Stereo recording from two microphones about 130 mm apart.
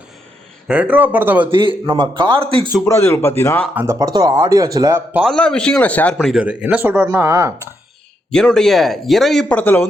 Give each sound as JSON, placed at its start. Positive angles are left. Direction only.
{"t": 0.7, "sound": "speech", "side_deg": -10}
{"t": 1.9, "sound": "a man's voice", "side_deg": -40}
{"t": 2.8, "sound": "speech", "side_deg": 20}
{"t": 3.8, "sound": "speech", "side_deg": -25}
{"t": 5.2, "sound": "speech", "side_deg": 5}
{"t": 6.1, "sound": "speech", "side_deg": -5}
{"t": 8.3, "sound": "speech", "side_deg": 5}